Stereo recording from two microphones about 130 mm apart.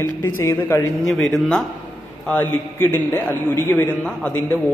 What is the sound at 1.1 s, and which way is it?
Speech, 5° left (ahead or behind).